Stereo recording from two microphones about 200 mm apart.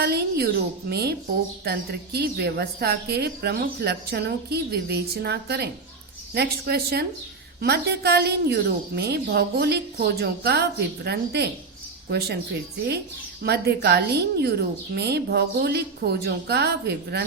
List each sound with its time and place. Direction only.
0.0 s a woman's voice: 55° right (ahead or behind)
13.4 s a woman's voice: 55° right (ahead or behind)